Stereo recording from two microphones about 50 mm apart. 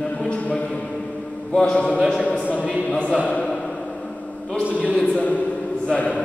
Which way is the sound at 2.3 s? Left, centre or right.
Left.